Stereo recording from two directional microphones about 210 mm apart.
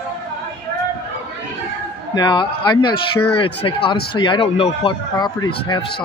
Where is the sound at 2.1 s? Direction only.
20° left (ahead or behind).